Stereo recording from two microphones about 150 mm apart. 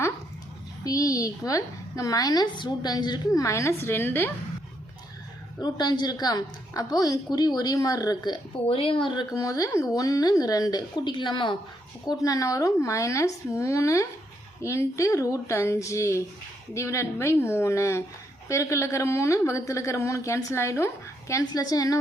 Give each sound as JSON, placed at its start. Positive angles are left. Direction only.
{"t": 0.9, "sound": "a woman's voice", "side_deg": 20}
{"t": 5.5, "sound": "a woman's voice", "side_deg": 25}